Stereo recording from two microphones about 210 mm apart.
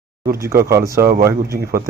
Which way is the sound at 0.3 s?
15° right (ahead or behind).